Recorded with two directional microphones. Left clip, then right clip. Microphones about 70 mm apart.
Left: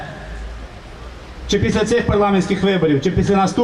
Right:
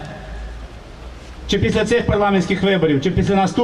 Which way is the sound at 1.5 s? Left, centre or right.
Right.